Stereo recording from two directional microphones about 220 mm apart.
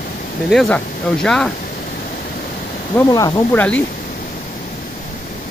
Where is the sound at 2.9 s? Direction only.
15° left (ahead or behind).